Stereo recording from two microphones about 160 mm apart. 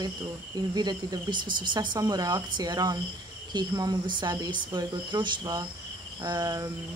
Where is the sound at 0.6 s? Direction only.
25° right (ahead or behind).